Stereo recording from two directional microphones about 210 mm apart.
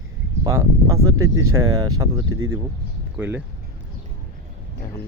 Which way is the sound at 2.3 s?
80° right.